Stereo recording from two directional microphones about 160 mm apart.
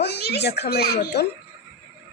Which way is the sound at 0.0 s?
90° left.